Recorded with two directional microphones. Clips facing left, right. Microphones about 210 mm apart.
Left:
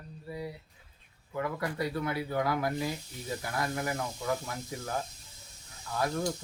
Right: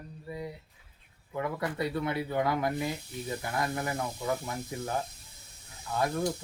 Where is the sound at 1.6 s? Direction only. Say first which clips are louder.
Right 1 dB; 25° right (ahead or behind).